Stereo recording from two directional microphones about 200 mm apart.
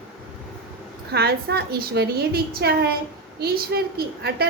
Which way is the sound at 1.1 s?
55° right (ahead or behind).